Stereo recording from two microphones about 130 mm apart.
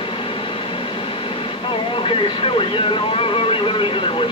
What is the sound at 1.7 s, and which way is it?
Speech, 45° left (ahead or behind).